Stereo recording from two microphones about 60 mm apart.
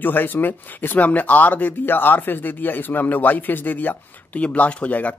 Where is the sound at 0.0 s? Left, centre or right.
Left.